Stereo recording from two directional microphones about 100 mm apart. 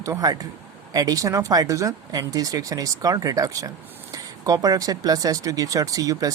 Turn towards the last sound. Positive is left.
turn(degrees=-35)  # may be behind; listen again after turning